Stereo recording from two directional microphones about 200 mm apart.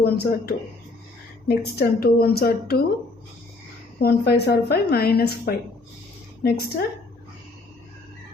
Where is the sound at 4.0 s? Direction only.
55° left (ahead or behind).